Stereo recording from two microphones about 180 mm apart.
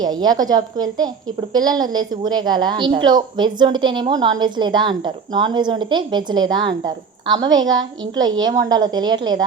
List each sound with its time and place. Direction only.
0.0 s a woman's voice: 20° right (ahead or behind)